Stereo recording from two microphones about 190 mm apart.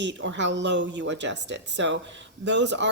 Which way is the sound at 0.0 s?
70° right (ahead or behind).